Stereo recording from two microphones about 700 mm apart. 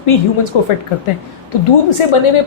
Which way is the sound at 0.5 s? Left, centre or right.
Left.